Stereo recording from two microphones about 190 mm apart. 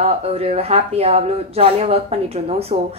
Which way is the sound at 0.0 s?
30° right (ahead or behind).